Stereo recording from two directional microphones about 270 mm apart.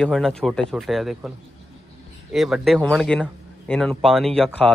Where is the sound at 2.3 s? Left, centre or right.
Centre.